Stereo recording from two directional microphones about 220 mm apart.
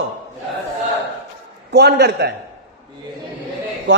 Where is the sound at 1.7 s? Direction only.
50° right (ahead or behind).